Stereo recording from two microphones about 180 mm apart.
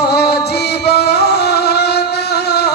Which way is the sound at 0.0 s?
65° left (ahead or behind).